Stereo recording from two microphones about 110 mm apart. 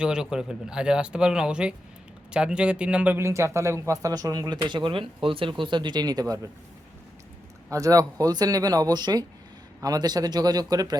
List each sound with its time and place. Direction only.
0.0 s speech: 5° right (ahead or behind); by 6.5 s 35° right (ahead or behind)
7.7 s speech: 30° right (ahead or behind)